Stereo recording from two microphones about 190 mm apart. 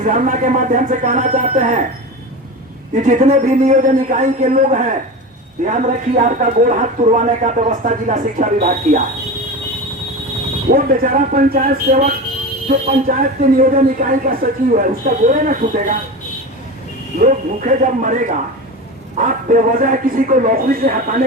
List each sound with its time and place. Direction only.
0.0 s speech: 40° right (ahead or behind)
2.9 s speech: 40° right (ahead or behind)
10.7 s a man's voice: 45° right (ahead or behind)
17.2 s a man's voice: 40° right (ahead or behind)
19.2 s a man's voice: 45° right (ahead or behind)